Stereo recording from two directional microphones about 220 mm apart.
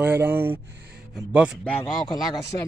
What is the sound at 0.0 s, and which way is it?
Speech, 10° right (ahead or behind).